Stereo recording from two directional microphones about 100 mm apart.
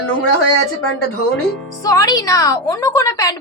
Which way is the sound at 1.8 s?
35° left (ahead or behind).